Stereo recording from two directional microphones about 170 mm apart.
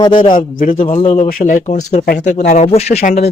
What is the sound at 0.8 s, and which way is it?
Speech, 40° left (ahead or behind).